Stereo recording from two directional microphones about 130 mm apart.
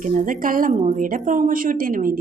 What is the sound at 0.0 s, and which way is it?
Speech, 80° right.